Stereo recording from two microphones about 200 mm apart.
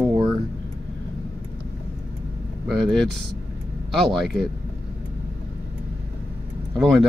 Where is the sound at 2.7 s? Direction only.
Centre (ahead or behind).